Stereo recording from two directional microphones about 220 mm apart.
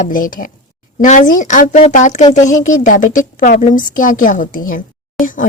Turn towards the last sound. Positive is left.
turn(degrees=35)  # may be behind; listen again after turning